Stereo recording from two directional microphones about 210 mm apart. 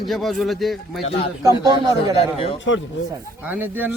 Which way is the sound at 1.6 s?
20° right (ahead or behind).